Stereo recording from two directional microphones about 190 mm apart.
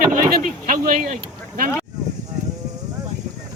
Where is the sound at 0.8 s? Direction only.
45° right (ahead or behind).